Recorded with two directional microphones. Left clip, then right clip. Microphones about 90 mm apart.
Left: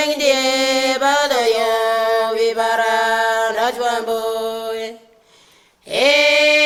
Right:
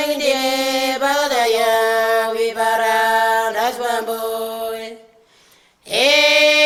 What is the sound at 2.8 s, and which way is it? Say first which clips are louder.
Mantra: right 2 dB; 50° right (ahead or behind).